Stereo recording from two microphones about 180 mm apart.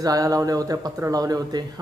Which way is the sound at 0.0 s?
20° right (ahead or behind).